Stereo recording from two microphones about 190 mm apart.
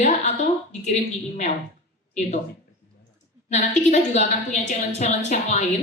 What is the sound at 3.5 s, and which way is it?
A woman's voice, 40° left (ahead or behind).